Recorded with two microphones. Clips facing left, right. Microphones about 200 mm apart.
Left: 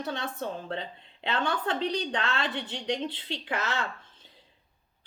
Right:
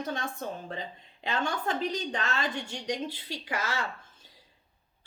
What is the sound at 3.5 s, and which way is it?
Speech, 5° right (ahead or behind).